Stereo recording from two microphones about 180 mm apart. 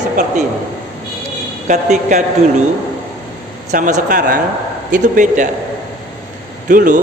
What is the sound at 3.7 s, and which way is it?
A man's voice, 45° right (ahead or behind).